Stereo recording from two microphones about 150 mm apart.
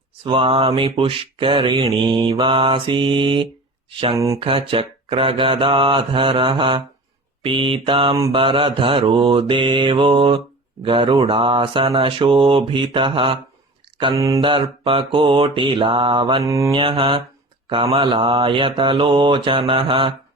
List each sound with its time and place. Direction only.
0.3 s mantra: 35° right (ahead or behind)
14.2 s mantra: 25° right (ahead or behind)
16.4 s mantra: 20° right (ahead or behind)
16.7 s mantra: 35° right (ahead or behind)